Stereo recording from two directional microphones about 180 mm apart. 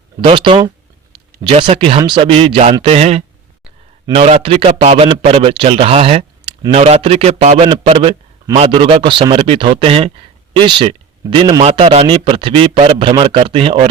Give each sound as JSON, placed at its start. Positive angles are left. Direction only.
{"t": 0.2, "sound": "a man's voice", "side_deg": -25}